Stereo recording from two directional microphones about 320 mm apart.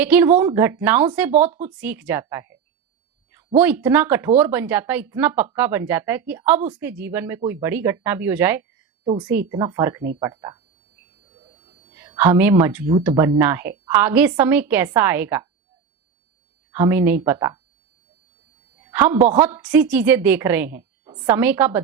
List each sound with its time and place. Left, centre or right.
0.0 s speech: centre
3.6 s speech: centre
11.3 s a sound: centre
11.9 s speech: centre
16.7 s speech: centre
18.9 s speech: centre